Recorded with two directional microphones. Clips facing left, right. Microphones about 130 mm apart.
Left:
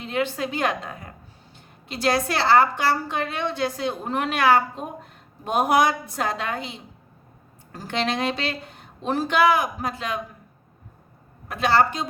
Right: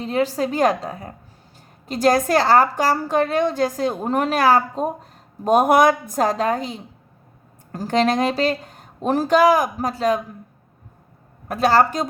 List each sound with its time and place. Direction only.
0.0 s a woman's voice: 35° right (ahead or behind)
11.4 s a woman's voice: 40° right (ahead or behind)